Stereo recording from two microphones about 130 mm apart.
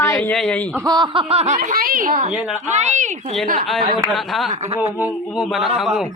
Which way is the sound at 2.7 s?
65° right (ahead or behind).